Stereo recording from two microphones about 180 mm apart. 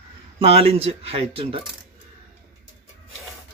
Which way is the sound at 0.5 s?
35° right (ahead or behind).